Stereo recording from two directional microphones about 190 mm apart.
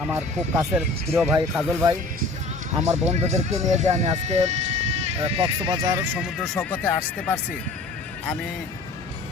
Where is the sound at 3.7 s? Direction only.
35° right (ahead or behind); by 7.4 s 10° left (ahead or behind).